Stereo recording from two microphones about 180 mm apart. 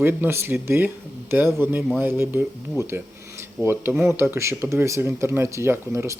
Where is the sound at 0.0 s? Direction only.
10° right (ahead or behind).